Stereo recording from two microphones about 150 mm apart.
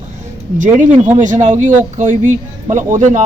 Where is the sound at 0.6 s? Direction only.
55° right (ahead or behind).